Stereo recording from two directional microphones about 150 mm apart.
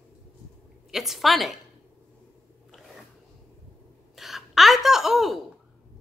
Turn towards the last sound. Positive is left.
turn(degrees=0)  # may be behind; listen again after turning